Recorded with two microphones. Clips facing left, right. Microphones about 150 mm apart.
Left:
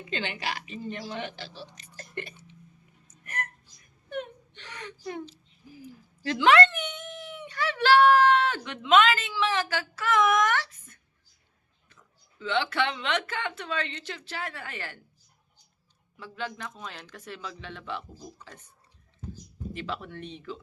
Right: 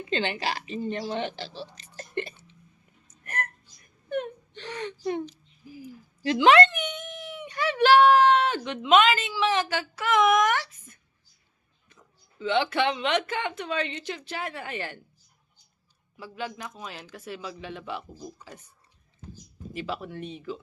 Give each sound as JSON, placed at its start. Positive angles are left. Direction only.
{"t": 0.1, "sound": "a woman's voice", "side_deg": -30}
{"t": 1.7, "sound": "a sound", "side_deg": -30}
{"t": 3.2, "sound": "hiccup", "side_deg": -50}
{"t": 4.5, "sound": "a woman's voice", "side_deg": -30}
{"t": 16.1, "sound": "speech", "side_deg": -10}
{"t": 19.7, "sound": "speech", "side_deg": -5}